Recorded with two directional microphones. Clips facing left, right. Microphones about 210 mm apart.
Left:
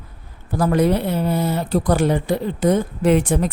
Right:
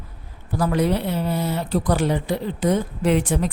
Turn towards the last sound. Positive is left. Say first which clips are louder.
# left 3 dB
turn(degrees=50)  # may be behind; listen again after turning